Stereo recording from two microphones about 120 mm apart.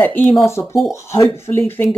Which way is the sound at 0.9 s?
25° left (ahead or behind).